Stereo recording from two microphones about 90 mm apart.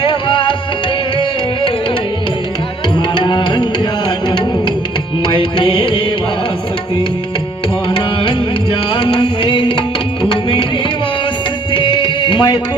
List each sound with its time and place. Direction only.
0.0 s music: 70° left (ahead or behind)
3.2 s music: 60° left (ahead or behind)
7.9 s music: 60° left (ahead or behind)
11.7 s music: 65° left (ahead or behind)